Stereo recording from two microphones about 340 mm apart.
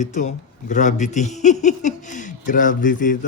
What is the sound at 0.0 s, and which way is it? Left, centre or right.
Speech, left.